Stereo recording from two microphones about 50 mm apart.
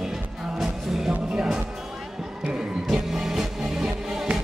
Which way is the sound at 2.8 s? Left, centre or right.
Centre.